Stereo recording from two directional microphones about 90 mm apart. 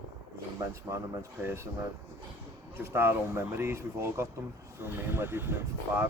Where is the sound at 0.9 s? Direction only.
35° right (ahead or behind).